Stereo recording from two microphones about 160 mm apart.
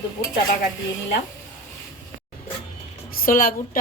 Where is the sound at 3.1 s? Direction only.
65° left (ahead or behind).